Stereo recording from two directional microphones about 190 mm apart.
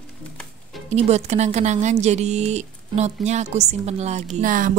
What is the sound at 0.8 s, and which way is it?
A woman's voice, 35° right (ahead or behind).